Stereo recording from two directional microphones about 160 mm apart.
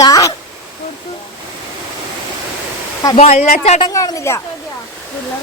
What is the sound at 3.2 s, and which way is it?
Speech, 40° left (ahead or behind).